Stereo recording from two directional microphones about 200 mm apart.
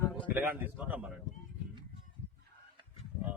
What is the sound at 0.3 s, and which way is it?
Speech, 10° right (ahead or behind).